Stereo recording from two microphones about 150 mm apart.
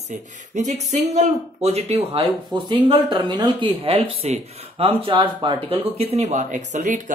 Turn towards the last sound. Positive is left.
turn(degrees=-55)  # may be behind; listen again after turning